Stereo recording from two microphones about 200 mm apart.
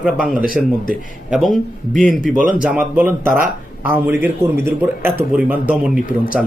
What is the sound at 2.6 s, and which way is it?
Speech, 5° right (ahead or behind).